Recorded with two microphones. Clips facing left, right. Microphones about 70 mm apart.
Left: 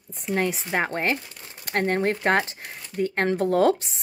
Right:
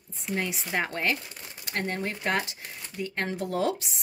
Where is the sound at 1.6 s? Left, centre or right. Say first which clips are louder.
Left 8 dB; left.